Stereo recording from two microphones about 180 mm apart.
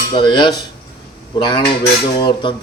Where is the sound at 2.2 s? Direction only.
25° left (ahead or behind).